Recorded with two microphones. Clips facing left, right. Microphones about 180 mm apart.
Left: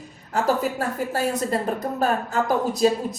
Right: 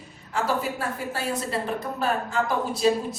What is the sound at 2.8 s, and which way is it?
Speech, 45° left (ahead or behind).